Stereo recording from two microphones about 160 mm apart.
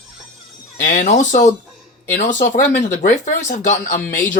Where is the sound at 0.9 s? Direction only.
55° left (ahead or behind).